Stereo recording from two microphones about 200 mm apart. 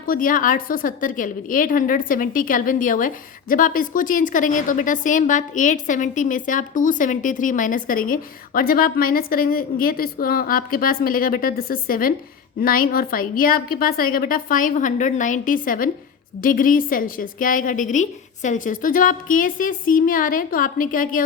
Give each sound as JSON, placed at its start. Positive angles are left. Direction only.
{"t": 0.1, "sound": "a woman's voice", "side_deg": 45}